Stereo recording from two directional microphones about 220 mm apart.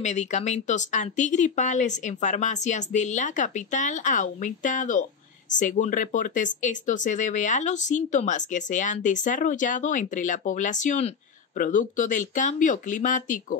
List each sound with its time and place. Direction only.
0.0 s speech: 30° left (ahead or behind)